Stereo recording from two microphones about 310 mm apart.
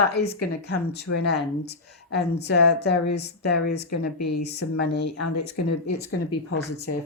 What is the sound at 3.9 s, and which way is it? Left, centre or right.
Speech, left.